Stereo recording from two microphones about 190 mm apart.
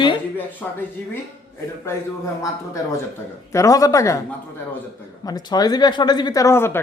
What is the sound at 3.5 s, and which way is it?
Speech, 15° left (ahead or behind).